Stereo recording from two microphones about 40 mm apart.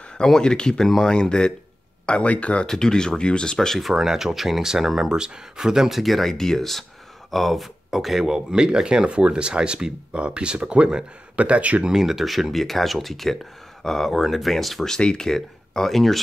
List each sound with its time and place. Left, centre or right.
0.2 s speech: centre
2.6 s speech: centre
3.5 s speech: centre
3.9 s speech: centre
5.1 s speech: centre
8.3 s speech: centre; by 11.8 s right
11.8 s speech: centre
15.0 s speech: centre